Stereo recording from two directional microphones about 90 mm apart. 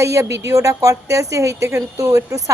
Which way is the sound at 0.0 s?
35° right (ahead or behind).